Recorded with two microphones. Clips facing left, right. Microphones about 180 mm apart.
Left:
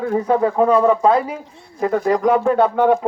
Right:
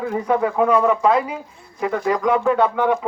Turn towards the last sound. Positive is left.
turn(degrees=45)  # may be behind; listen again after turning